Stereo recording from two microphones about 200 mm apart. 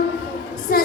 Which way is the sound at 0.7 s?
45° left (ahead or behind).